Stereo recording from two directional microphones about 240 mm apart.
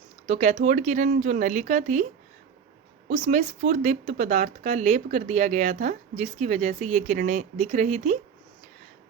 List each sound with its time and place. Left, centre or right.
0.3 s speech: right
3.1 s speech: right